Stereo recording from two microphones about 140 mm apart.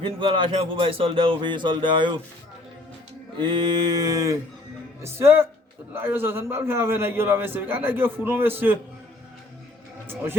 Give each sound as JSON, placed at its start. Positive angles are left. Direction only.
{"t": 0.0, "sound": "speech", "side_deg": -35}
{"t": 3.3, "sound": "mantra", "side_deg": -35}
{"t": 5.1, "sound": "a man's voice", "side_deg": -15}